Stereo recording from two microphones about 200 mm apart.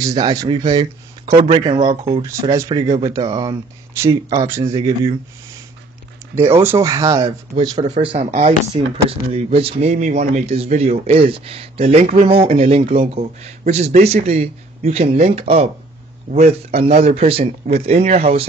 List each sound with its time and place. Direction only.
0.1 s speech: 20° right (ahead or behind)
3.9 s speech: 15° right (ahead or behind)
4.6 s speech: 30° right (ahead or behind)
6.4 s speech: 10° right (ahead or behind); by 18.5 s 30° right (ahead or behind)